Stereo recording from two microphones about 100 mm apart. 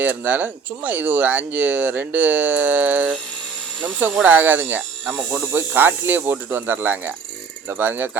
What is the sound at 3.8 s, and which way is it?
Speech, 15° right (ahead or behind).